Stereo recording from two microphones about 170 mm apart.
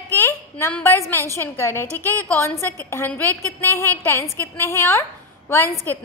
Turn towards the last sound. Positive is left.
turn(degrees=15)  # may be behind; listen again after turning